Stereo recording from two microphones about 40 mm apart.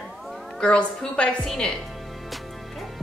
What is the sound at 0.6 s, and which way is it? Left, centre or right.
A woman's voice, left.